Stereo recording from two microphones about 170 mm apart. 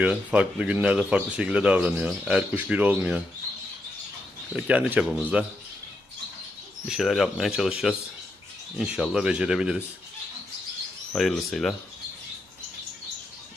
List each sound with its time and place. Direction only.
0.0 s speech: 5° right (ahead or behind)
4.5 s speech: 5° right (ahead or behind)
6.8 s speech: centre (ahead or behind)
11.1 s speech: centre (ahead or behind)